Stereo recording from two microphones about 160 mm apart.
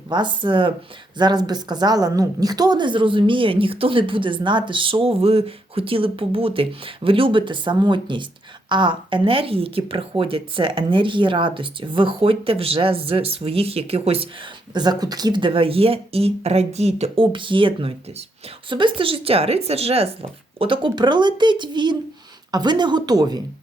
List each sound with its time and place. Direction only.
0.1 s a woman's voice: 30° right (ahead or behind)
14.7 s a woman's voice: 25° right (ahead or behind)